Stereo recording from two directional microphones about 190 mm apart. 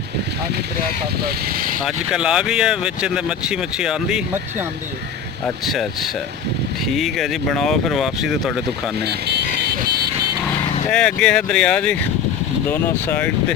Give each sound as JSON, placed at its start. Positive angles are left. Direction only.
{"t": 1.2, "sound": "speech", "side_deg": -50}
{"t": 1.8, "sound": "speech", "side_deg": -5}
{"t": 5.6, "sound": "speech", "side_deg": 0}
{"t": 9.0, "sound": "vehicle", "side_deg": -60}
{"t": 10.9, "sound": "speech", "side_deg": 5}